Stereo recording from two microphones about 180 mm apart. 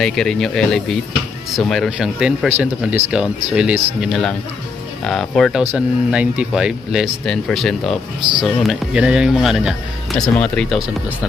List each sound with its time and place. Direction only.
0.0 s speech: 5° left (ahead or behind)
8.2 s speech: 25° right (ahead or behind)
8.4 s speech: centre (ahead or behind)